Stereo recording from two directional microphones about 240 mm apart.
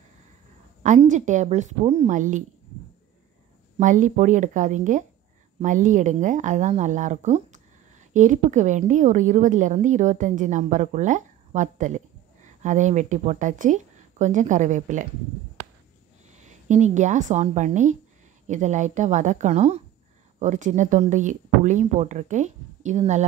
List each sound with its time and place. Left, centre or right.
0.8 s a woman's voice: right
3.7 s a woman's voice: right
16.3 s a woman's voice: right